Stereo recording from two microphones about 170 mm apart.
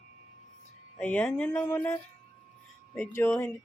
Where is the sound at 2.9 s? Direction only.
10° left (ahead or behind).